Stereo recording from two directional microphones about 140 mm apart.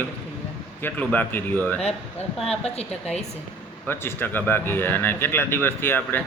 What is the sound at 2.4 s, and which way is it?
Speech, 50° left (ahead or behind).